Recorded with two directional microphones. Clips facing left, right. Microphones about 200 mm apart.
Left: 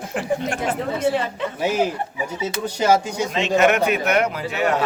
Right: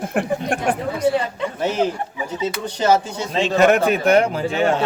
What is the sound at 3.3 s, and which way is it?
A man's voice, 35° right (ahead or behind).